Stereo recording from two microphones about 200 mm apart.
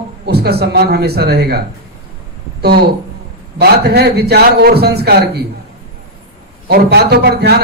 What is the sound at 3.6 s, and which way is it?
A man's voice, 55° right (ahead or behind).